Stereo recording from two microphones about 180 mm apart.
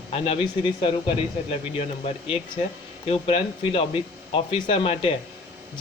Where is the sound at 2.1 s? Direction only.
30° left (ahead or behind).